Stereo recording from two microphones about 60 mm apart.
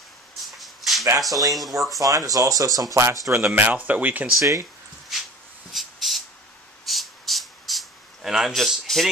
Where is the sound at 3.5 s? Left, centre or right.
Right.